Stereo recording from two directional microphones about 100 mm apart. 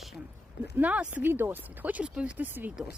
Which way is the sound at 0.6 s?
15° right (ahead or behind).